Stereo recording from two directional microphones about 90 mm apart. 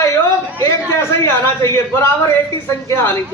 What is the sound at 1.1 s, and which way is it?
Speech, 30° left (ahead or behind).